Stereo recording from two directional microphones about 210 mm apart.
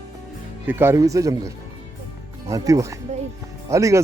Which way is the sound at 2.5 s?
15° right (ahead or behind).